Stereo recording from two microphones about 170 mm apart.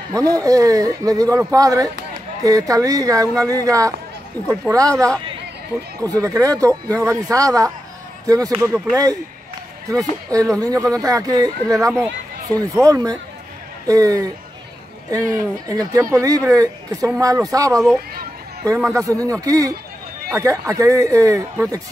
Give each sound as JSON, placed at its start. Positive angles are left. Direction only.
{"t": 0.1, "sound": "speech", "side_deg": -20}
{"t": 15.7, "sound": "speech", "side_deg": -20}